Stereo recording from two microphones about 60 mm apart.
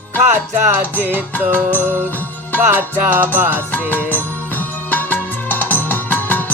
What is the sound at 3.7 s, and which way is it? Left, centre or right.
Music, left.